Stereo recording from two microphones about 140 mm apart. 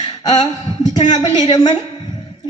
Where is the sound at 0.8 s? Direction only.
30° left (ahead or behind).